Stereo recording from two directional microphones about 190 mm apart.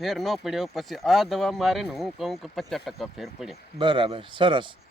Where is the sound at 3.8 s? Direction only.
25° right (ahead or behind).